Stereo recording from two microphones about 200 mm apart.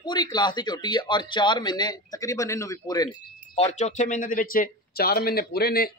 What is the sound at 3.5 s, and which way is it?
A man's voice, 35° left (ahead or behind).